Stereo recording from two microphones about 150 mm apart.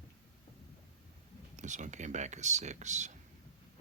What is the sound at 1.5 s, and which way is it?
Speech, 55° right (ahead or behind).